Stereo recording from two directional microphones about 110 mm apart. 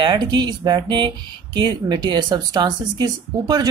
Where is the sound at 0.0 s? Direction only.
45° right (ahead or behind).